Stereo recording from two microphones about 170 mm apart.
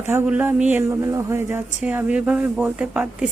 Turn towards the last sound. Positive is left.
turn(degrees=-5)  # may be behind; listen again after turning